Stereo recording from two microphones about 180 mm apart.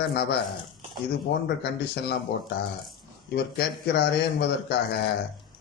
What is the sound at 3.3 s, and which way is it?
A man's voice, 65° left (ahead or behind).